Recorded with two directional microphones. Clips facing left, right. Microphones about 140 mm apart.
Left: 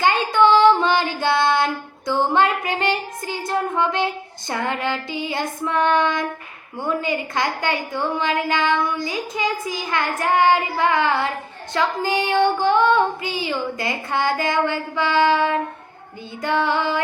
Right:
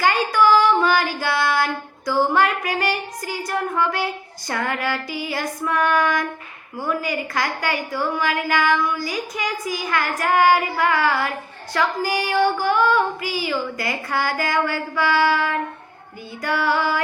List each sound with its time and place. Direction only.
0.0 s child singing: 25° left (ahead or behind)
6.7 s a woman's voice: 25° left (ahead or behind)